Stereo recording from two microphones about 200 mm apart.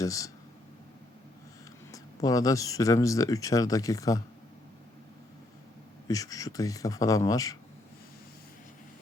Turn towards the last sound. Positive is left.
turn(degrees=15)  # may be behind; listen again after turning